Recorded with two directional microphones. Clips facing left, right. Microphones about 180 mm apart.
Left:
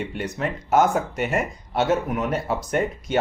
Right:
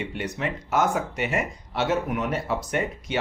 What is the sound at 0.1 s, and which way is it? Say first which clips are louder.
Speech: left 2 dB; 45° left (ahead or behind).